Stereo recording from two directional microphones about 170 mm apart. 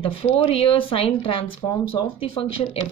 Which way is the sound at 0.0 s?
35° left (ahead or behind).